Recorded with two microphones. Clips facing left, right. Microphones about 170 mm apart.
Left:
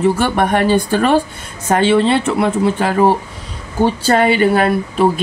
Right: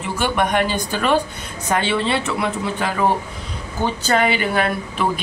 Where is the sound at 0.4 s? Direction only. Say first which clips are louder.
Left 4 dB; 40° left (ahead or behind).